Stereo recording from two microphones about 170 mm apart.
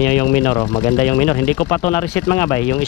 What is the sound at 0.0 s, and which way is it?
Speech, 10° left (ahead or behind).